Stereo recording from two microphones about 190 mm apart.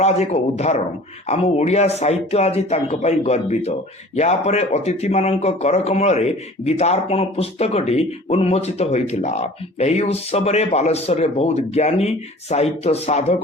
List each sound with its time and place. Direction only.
0.0 s speech: 35° left (ahead or behind)